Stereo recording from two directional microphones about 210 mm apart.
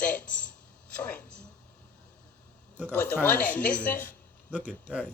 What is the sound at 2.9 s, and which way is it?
Speech, 10° left (ahead or behind).